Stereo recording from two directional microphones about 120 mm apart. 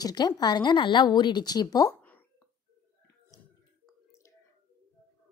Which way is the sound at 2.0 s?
15° left (ahead or behind).